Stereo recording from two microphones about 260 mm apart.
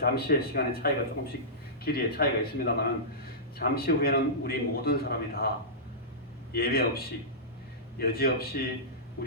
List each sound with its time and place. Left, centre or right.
0.0 s a man's voice: left
6.5 s a man's voice: left
9.2 s music: left